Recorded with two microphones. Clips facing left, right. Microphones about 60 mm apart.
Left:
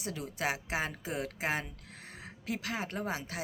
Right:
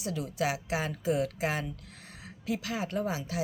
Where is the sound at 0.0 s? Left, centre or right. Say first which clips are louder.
Right 4 dB; left.